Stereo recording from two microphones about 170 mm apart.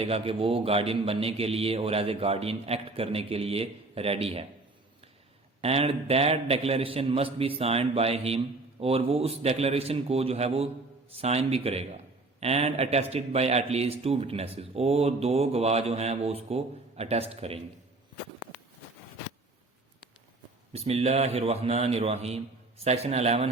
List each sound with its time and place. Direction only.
0.0 s a man's voice: 35° right (ahead or behind)
5.6 s a man's voice: 35° right (ahead or behind)
20.7 s a man's voice: 35° right (ahead or behind)